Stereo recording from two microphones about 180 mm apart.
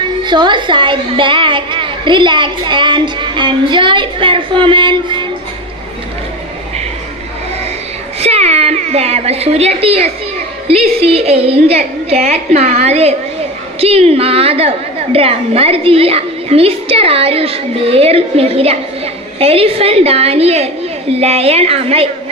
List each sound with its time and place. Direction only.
0.3 s a woman's voice: 25° right (ahead or behind)
8.2 s a woman's voice: 35° right (ahead or behind)